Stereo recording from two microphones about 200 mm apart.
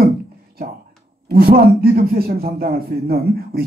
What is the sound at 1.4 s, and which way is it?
A man's voice, 50° right (ahead or behind).